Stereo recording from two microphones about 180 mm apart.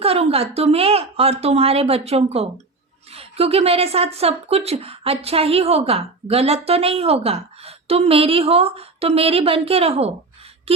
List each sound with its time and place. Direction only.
0.0 s a woman's voice: 35° right (ahead or behind)